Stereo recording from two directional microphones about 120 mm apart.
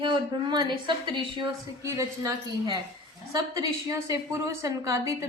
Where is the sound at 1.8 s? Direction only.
25° right (ahead or behind).